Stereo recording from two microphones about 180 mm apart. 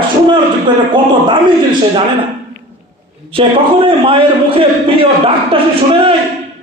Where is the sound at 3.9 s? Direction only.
30° right (ahead or behind).